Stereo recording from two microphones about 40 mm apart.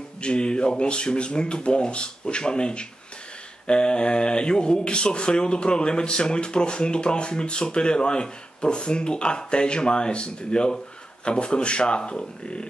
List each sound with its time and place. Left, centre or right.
0.2 s speech: left